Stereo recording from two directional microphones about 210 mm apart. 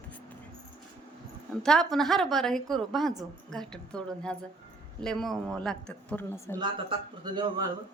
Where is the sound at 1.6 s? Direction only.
Centre (ahead or behind).